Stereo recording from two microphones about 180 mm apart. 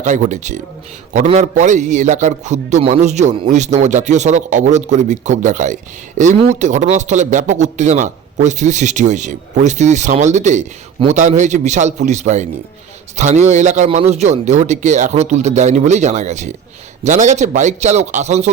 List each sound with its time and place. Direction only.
0.0 s a man's voice: 45° right (ahead or behind)